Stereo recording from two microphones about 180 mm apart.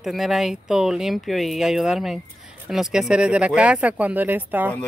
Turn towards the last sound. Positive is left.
turn(degrees=-10)  # may be behind; listen again after turning